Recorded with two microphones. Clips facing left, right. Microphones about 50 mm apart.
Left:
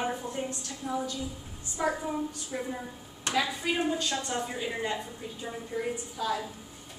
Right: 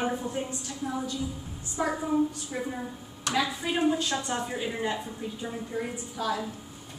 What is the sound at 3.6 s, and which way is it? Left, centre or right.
A woman's voice, centre.